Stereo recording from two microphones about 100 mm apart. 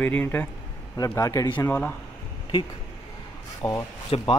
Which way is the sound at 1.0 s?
35° left (ahead or behind).